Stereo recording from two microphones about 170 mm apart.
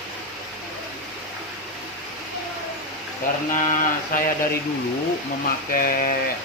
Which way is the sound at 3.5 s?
50° left (ahead or behind).